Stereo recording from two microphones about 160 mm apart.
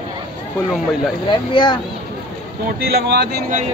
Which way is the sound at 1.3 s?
30° left (ahead or behind).